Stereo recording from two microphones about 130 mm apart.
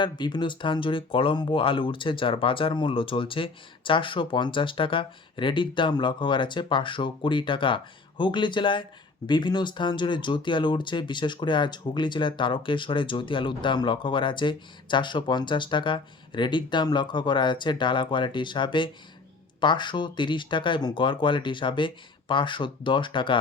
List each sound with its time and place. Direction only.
0.0 s speech: 35° left (ahead or behind)